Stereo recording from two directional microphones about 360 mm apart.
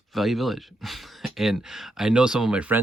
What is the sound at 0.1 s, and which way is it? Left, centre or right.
Speech, centre.